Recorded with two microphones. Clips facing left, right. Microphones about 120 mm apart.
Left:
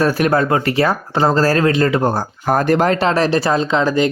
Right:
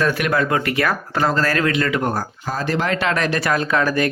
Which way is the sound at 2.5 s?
55° left (ahead or behind).